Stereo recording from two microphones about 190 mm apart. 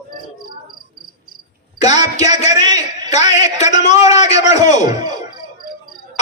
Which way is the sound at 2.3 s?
40° left (ahead or behind).